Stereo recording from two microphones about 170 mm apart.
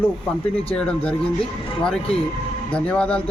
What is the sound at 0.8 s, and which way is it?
Speech, 5° left (ahead or behind).